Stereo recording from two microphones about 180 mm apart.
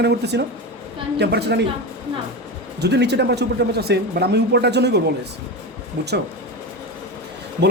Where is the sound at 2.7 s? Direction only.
65° right (ahead or behind).